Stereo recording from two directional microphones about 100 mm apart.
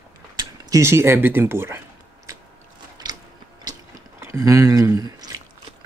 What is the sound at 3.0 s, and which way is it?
Gears, 45° right (ahead or behind).